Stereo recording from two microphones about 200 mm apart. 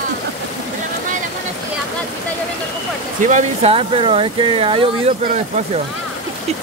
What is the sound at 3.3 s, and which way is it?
Speech, 35° right (ahead or behind).